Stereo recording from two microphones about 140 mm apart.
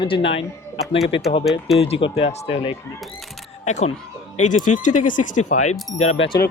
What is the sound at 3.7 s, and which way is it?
Speech, 55° left (ahead or behind).